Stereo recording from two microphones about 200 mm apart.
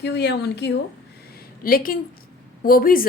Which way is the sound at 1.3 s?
45° left (ahead or behind).